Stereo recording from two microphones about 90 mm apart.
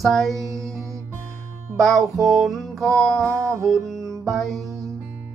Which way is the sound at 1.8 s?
Centre (ahead or behind).